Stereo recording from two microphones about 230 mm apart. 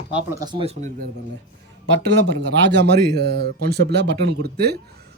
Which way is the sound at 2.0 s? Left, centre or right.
Right.